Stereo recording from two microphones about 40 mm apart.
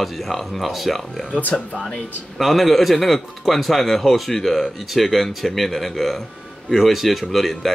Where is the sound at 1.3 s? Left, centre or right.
Left.